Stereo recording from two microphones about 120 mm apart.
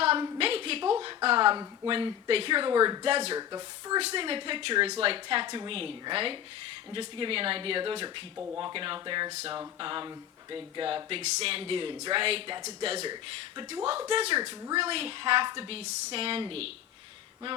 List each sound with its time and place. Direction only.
0.3 s a sound: 50° right (ahead or behind)
1.9 s speech: 45° right (ahead or behind)
3.1 s speech: 55° right (ahead or behind)
3.3 s speech: 35° right (ahead or behind)
4.0 s speech: 50° right (ahead or behind)